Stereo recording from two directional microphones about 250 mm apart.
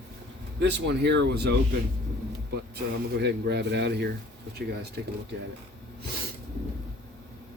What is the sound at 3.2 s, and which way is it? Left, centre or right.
Speech, right.